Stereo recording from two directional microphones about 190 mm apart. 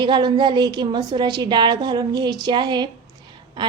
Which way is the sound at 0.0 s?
25° right (ahead or behind).